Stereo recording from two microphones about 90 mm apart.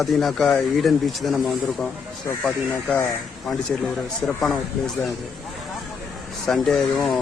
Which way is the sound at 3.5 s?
Centre (ahead or behind).